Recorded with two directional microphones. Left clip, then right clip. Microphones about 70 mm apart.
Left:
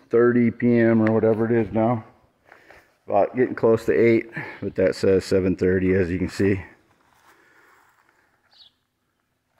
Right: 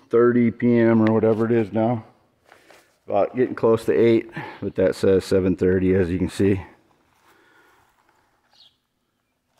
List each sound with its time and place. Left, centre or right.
0.0 s speech: centre
0.8 s speech: right
1.9 s a sound: centre
3.6 s speech: centre
3.9 s speech: right